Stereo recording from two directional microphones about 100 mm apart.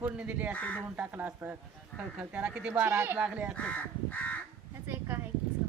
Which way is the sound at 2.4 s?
15° right (ahead or behind).